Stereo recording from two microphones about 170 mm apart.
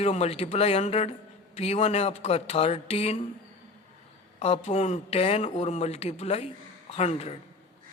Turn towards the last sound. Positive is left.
turn(degrees=40)  # may be behind; listen again after turning